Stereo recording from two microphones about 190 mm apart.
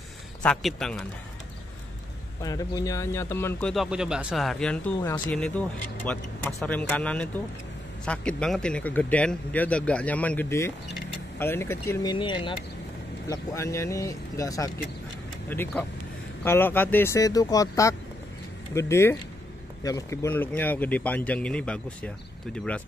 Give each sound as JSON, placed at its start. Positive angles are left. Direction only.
{"t": 0.4, "sound": "speech", "side_deg": 0}
{"t": 2.4, "sound": "speech", "side_deg": 20}
{"t": 3.7, "sound": "speech", "side_deg": -5}